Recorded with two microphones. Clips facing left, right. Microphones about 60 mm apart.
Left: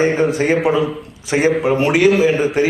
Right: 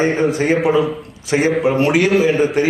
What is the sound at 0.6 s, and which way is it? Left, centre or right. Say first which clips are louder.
Speech: right 1 dB; centre.